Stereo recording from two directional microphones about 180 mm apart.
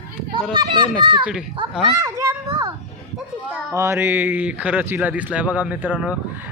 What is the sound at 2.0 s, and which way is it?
Speech, 20° right (ahead or behind).